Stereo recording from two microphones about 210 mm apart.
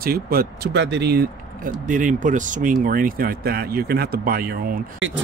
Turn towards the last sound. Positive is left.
turn(degrees=-65)  # may be behind; listen again after turning